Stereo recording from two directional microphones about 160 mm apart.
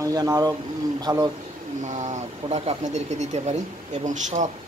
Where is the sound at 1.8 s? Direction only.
45° right (ahead or behind).